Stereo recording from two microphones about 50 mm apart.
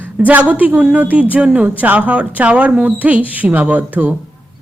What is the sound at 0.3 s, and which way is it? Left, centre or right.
Speech, right.